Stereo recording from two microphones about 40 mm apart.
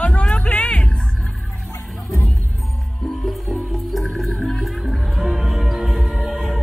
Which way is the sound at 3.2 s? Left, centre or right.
Centre.